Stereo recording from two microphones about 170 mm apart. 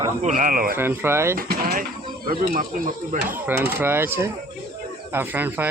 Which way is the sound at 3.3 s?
10° right (ahead or behind).